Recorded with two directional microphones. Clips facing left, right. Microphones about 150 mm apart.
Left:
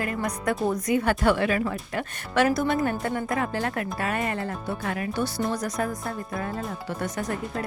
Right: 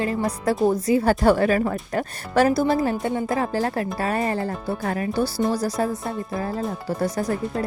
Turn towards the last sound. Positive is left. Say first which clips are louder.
# right 5 dB
turn(degrees=-35)  # may be behind; listen again after turning